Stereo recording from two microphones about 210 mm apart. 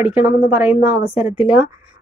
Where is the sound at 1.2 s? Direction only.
5° right (ahead or behind).